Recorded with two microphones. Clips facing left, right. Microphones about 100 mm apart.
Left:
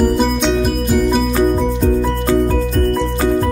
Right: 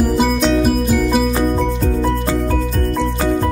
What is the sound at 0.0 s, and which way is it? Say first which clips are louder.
Music: left 1 dB; centre (ahead or behind).